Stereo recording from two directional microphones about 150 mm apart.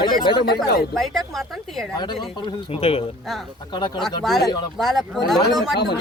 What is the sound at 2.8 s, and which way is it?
Speech, 40° left (ahead or behind).